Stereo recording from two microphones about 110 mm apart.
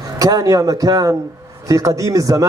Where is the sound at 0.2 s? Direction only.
35° right (ahead or behind).